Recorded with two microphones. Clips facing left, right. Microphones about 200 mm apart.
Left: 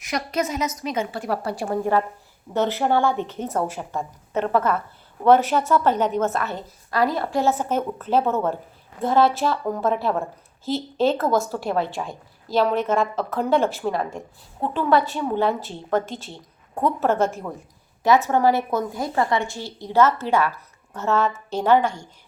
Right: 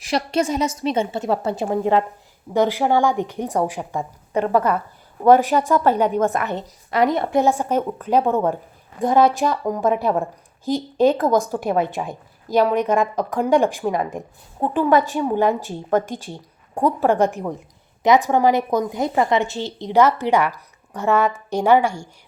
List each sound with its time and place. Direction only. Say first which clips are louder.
0.0 s a woman's voice: right 4 dB; 30° right (ahead or behind); by 22.1 s 10° right (ahead or behind)